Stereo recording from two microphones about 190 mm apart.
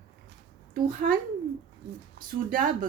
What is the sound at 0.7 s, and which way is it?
Speech, 45° right (ahead or behind).